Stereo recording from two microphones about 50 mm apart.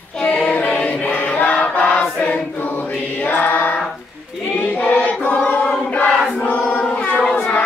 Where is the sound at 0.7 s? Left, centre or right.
Left.